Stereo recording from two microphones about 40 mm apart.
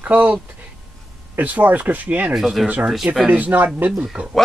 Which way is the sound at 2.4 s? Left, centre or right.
Centre.